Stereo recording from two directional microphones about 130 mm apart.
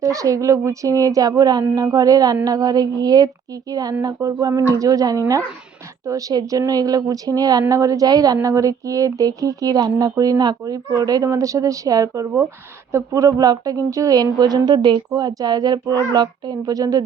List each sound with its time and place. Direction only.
0.0 s a woman's voice: 25° right (ahead or behind)